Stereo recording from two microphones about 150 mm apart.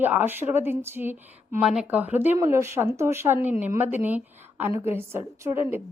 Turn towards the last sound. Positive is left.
turn(degrees=-15)  # may be behind; listen again after turning